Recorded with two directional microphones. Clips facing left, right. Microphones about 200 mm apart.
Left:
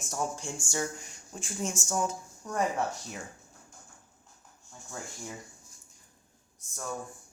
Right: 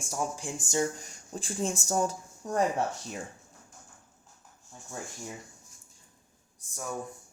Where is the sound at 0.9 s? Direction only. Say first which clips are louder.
Right 4 dB; 35° right (ahead or behind).